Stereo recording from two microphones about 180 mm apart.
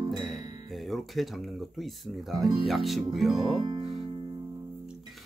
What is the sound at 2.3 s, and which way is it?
Speech, centre (ahead or behind).